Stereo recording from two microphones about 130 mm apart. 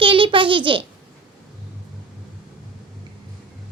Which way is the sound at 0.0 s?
40° right (ahead or behind).